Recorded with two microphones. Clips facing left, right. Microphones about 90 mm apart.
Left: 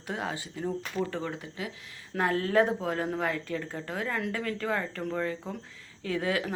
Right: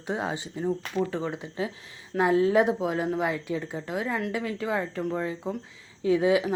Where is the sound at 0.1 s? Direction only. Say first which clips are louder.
Right 4 dB; 20° right (ahead or behind).